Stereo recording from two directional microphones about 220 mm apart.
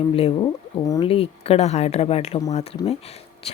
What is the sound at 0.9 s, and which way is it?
Speech, 20° left (ahead or behind).